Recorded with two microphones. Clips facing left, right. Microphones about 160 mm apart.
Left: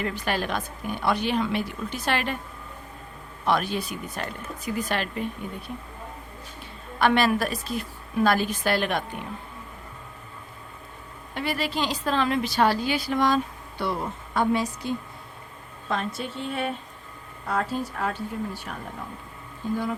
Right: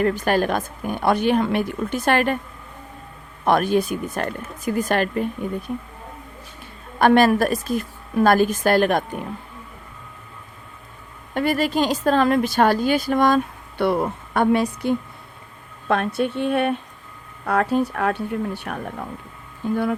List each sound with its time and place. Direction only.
0.0 s a woman's voice: 45° right (ahead or behind)
3.4 s a woman's voice: 50° right (ahead or behind)
7.0 s a woman's voice: 45° right (ahead or behind)
11.3 s a woman's voice: 45° right (ahead or behind)